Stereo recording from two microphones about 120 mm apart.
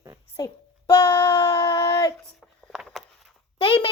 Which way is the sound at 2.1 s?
5° left (ahead or behind).